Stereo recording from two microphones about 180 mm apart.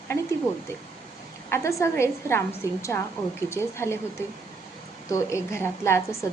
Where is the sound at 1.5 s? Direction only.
15° left (ahead or behind).